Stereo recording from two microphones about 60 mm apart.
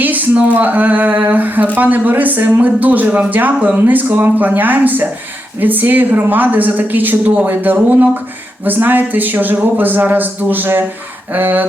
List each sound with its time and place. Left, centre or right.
0.0 s a woman's voice: right